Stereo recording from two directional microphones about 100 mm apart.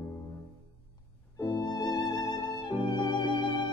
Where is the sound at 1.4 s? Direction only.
40° left (ahead or behind).